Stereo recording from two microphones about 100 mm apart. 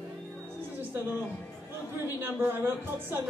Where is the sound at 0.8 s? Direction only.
20° right (ahead or behind).